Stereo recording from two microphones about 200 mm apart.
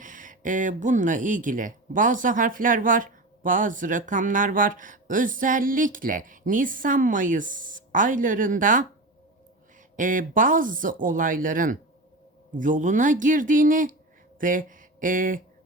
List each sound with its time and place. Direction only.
0.0 s speech: 40° right (ahead or behind)
9.9 s speech: 40° right (ahead or behind)